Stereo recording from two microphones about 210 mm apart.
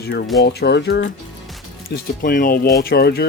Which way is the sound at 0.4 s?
55° left (ahead or behind).